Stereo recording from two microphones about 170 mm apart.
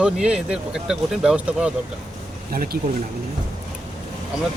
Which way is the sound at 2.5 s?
60° right (ahead or behind).